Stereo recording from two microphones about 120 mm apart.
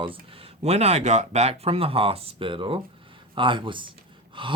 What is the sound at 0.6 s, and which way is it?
Speech, 65° right (ahead or behind).